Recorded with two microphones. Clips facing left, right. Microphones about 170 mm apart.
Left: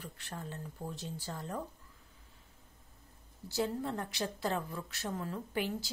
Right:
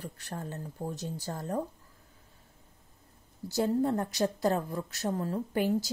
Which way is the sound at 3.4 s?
45° right (ahead or behind).